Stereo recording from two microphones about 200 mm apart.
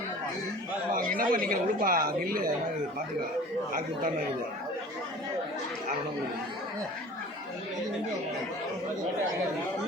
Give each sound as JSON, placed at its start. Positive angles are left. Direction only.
{"t": 1.1, "sound": "a man's voice", "side_deg": -45}
{"t": 3.7, "sound": "a woman's voice", "side_deg": -45}